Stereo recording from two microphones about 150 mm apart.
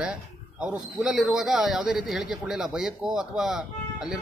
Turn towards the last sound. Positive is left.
turn(degrees=-5)  # may be behind; listen again after turning